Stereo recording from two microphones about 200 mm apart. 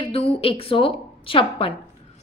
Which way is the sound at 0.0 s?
30° left (ahead or behind).